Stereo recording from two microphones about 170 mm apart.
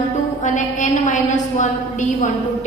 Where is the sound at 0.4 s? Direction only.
45° left (ahead or behind).